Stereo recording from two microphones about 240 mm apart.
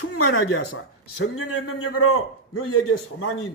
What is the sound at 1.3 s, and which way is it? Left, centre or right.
A man's voice, left.